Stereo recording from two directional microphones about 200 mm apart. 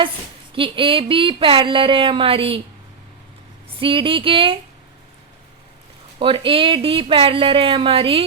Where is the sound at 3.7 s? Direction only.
25° right (ahead or behind).